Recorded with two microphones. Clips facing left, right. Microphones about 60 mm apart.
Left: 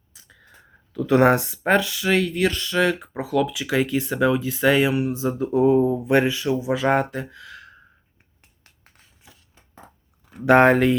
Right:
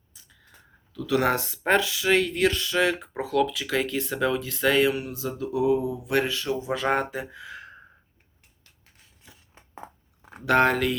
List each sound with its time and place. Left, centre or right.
0.1 s a sound: left
0.9 s speech: left
1.2 s speech: left
1.5 s speech: centre; by 6.1 s left
6.1 s speech: left
6.4 s speech: centre
7.1 s speech: centre
10.4 s speech: left